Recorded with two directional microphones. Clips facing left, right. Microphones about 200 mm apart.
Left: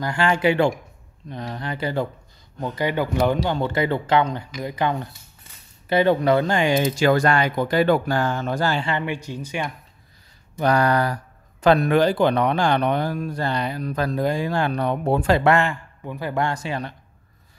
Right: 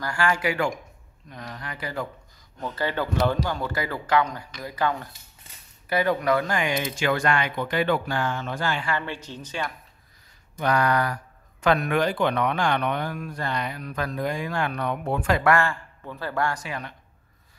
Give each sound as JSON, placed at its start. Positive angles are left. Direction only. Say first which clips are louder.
{"t": 0.0, "sound": "speech", "louder": "left 5 dB", "side_deg": 20}
{"t": 2.6, "sound": "speech", "louder": "left 4 dB", "side_deg": 15}
{"t": 3.4, "sound": "speech", "louder": "left 6 dB", "side_deg": 25}
{"t": 8.8, "sound": "speech", "louder": "left 4 dB", "side_deg": 20}
{"t": 10.6, "sound": "speech", "louder": "left 4 dB", "side_deg": 35}